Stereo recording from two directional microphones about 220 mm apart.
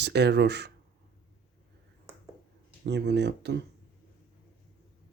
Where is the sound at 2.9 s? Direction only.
50° right (ahead or behind).